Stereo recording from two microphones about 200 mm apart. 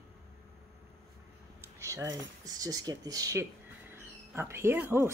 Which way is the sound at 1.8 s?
15° right (ahead or behind).